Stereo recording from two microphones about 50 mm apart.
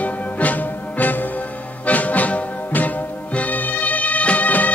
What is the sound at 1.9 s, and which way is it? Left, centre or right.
Music, left.